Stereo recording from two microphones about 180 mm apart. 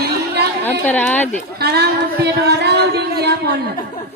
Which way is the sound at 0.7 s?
10° left (ahead or behind).